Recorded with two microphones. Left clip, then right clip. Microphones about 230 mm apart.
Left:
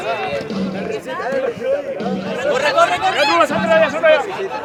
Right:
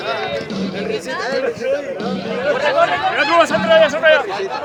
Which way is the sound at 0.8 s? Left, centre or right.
Right.